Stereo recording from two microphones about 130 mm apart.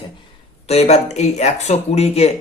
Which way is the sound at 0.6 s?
55° left (ahead or behind).